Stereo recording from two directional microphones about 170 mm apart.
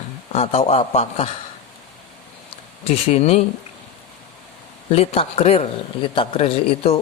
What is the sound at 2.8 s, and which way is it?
Speech, 35° left (ahead or behind).